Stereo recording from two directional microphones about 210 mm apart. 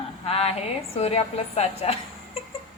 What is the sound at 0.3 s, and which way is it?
A woman's voice, 30° left (ahead or behind).